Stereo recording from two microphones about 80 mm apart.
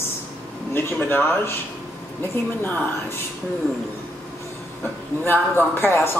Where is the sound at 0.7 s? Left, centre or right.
Left.